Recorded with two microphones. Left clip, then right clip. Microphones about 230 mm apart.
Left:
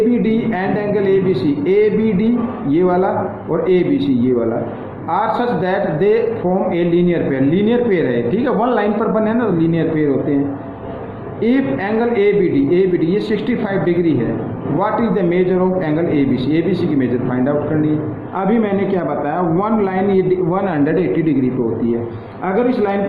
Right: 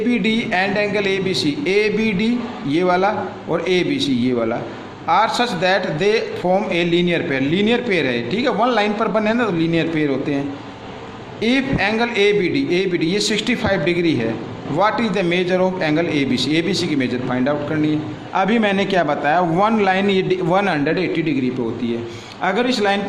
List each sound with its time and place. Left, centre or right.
0.1 s a man's voice: right
11.4 s a man's voice: right
22.4 s a man's voice: right